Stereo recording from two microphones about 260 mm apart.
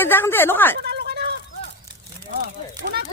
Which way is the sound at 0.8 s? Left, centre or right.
Right.